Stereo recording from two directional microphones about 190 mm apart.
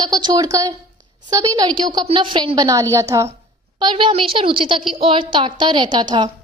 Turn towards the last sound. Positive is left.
turn(degrees=-25)  # may be behind; listen again after turning